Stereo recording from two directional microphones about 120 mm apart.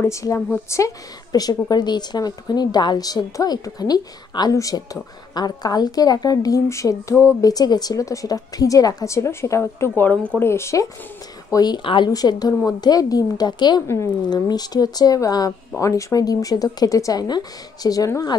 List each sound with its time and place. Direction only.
0.0 s a woman's voice: 25° left (ahead or behind)
11.5 s a woman's voice: 35° left (ahead or behind)